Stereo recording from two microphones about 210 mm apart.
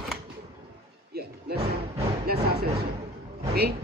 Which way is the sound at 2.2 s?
50° right (ahead or behind).